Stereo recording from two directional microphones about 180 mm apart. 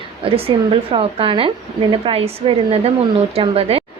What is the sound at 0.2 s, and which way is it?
A woman's voice, 30° right (ahead or behind).